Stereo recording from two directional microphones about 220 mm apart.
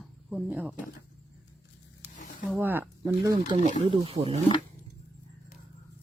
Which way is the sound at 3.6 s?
30° right (ahead or behind).